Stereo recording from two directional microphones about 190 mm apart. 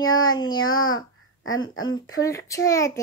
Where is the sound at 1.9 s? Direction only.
20° left (ahead or behind).